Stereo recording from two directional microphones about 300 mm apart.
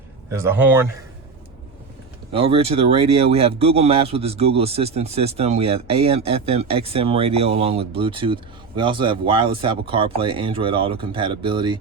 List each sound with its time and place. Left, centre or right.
0.3 s speech: centre
2.3 s speech: centre